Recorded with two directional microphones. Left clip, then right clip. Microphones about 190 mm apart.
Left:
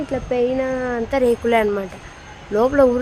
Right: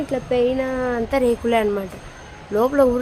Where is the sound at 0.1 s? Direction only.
10° left (ahead or behind).